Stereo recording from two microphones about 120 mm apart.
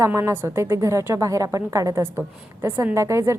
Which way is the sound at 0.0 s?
25° right (ahead or behind).